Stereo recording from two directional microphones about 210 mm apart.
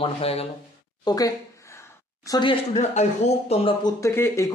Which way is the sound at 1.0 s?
15° left (ahead or behind).